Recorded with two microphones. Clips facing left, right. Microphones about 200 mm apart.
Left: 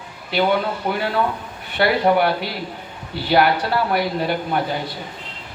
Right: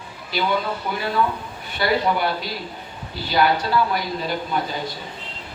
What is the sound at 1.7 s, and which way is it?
A man's voice, 60° left (ahead or behind).